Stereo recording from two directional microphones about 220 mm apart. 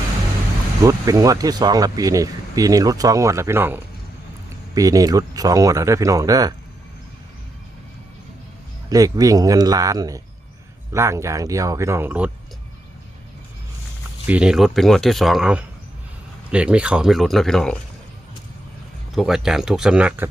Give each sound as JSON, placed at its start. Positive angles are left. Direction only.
{"t": 0.8, "sound": "speech", "side_deg": -15}
{"t": 8.9, "sound": "speech", "side_deg": -15}
{"t": 14.3, "sound": "speech", "side_deg": -5}
{"t": 19.1, "sound": "speech", "side_deg": 0}